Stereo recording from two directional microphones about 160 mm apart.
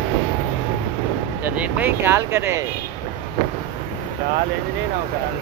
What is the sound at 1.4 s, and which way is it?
Speech, 10° right (ahead or behind).